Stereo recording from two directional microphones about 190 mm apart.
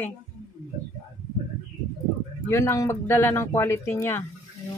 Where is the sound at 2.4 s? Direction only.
15° left (ahead or behind).